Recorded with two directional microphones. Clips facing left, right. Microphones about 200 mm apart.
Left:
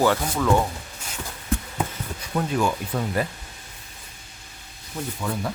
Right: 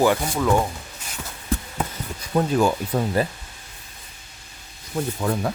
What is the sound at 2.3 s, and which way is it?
Speech, 35° right (ahead or behind).